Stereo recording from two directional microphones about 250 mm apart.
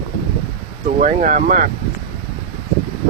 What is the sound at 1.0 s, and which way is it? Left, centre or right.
Speech, right.